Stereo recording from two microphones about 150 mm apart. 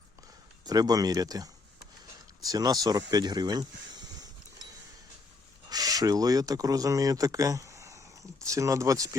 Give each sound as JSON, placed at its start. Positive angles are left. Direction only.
{"t": 0.6, "sound": "speech", "side_deg": -25}
{"t": 5.6, "sound": "speech", "side_deg": -25}